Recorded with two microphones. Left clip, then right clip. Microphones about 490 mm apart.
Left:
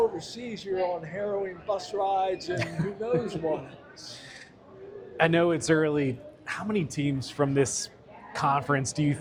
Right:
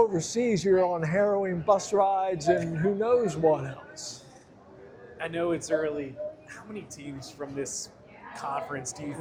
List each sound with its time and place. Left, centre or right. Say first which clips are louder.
0.2 s a man's voice: right 11 dB; right
5.1 s a man's voice: left 6 dB; left